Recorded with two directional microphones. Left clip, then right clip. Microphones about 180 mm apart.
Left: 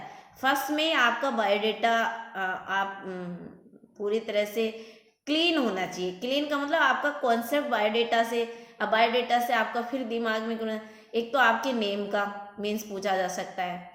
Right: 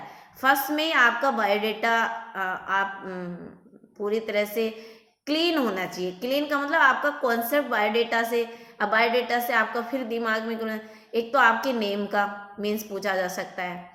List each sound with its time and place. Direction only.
0.4 s a woman's voice: 15° right (ahead or behind)